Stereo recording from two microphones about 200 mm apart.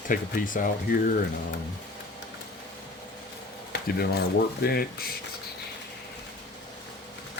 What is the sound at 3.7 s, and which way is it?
Speech, 50° left (ahead or behind).